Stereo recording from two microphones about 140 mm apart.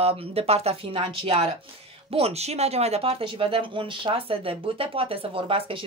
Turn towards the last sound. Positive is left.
turn(degrees=-40)  # may be behind; listen again after turning